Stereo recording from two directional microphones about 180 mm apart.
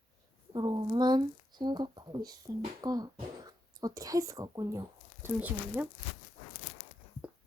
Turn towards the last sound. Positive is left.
turn(degrees=-10)  # may be behind; listen again after turning